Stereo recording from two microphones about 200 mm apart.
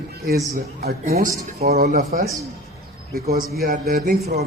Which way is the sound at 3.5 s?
50° right (ahead or behind).